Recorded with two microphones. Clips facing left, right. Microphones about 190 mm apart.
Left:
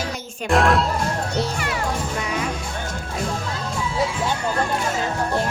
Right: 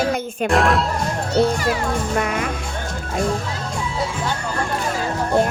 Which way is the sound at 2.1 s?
55° right (ahead or behind).